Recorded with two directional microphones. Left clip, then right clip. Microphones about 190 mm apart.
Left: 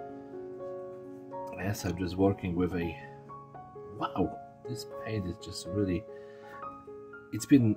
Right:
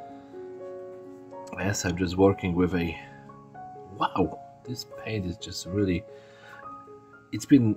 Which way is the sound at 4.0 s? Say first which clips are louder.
Right 6 dB; 20° right (ahead or behind).